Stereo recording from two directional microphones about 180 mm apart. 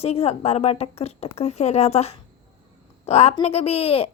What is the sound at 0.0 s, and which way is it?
Speech, 35° left (ahead or behind).